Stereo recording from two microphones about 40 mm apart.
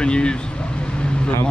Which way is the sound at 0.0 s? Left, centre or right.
Left.